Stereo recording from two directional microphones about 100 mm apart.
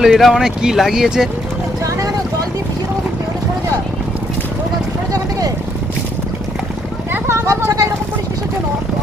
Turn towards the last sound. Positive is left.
turn(degrees=-25)  # may be behind; listen again after turning